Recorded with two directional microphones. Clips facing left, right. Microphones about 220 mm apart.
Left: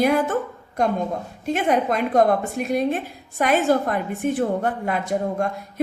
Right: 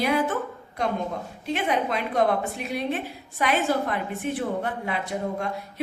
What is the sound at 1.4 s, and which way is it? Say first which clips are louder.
A woman's voice: left 5 dB; 45° left (ahead or behind).